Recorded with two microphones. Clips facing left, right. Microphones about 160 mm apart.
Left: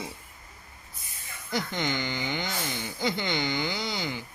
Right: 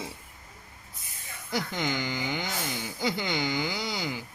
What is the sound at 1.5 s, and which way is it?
Speech, 10° right (ahead or behind).